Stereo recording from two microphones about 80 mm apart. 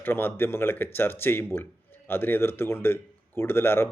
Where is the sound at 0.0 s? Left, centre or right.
Left.